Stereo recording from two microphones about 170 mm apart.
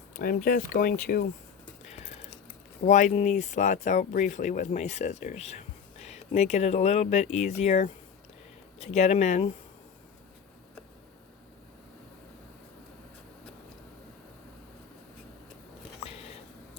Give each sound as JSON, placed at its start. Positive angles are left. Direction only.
{"t": 0.2, "sound": "speech", "side_deg": 55}
{"t": 2.8, "sound": "speech", "side_deg": 45}